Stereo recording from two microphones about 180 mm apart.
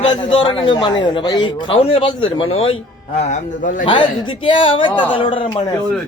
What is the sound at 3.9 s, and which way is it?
A man's voice, 25° left (ahead or behind).